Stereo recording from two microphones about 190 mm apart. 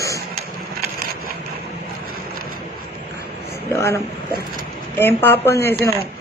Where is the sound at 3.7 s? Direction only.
15° left (ahead or behind).